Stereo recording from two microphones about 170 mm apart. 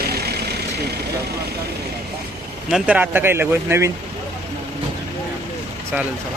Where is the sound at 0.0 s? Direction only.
70° right (ahead or behind).